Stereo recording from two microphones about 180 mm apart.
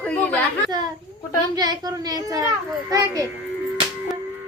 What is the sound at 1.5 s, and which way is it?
A child's voice, 20° right (ahead or behind).